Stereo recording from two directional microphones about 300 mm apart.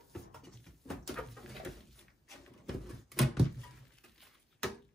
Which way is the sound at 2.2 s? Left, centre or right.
Centre.